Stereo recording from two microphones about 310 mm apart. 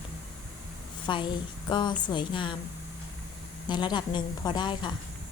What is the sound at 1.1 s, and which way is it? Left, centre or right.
A woman's voice, centre.